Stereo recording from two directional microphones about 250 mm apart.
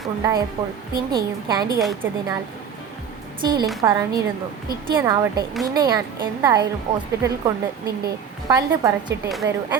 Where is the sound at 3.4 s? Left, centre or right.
Centre.